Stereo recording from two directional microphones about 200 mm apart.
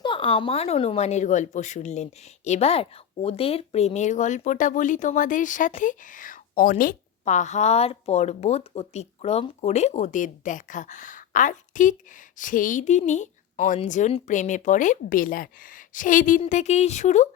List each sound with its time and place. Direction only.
0.0 s speech: 25° left (ahead or behind)